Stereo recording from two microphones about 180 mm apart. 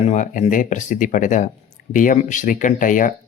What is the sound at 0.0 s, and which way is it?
Speech, 45° left (ahead or behind).